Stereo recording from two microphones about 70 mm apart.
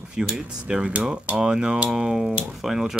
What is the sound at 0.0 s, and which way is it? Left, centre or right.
Speech, centre.